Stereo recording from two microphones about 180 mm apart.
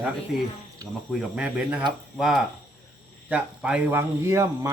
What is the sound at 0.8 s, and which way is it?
Speech, 20° right (ahead or behind).